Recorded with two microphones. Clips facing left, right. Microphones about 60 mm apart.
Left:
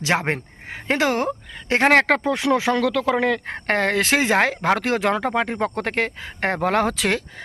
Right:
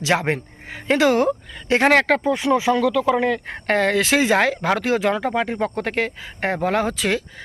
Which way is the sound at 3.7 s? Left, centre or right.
Left.